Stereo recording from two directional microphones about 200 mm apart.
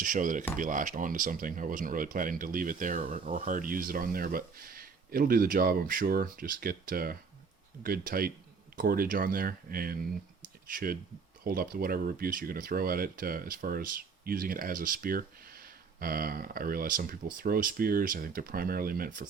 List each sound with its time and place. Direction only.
0.0 s cutlery: 40° right (ahead or behind)
0.5 s speech: 40° right (ahead or behind)